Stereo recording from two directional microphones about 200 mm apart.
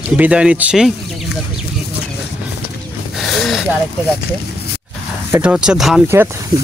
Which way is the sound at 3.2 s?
Centre (ahead or behind).